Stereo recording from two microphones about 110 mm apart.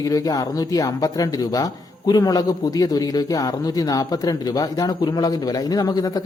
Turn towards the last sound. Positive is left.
turn(degrees=35)  # may be behind; listen again after turning